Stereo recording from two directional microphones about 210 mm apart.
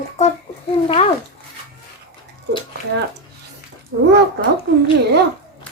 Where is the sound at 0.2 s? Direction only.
30° left (ahead or behind).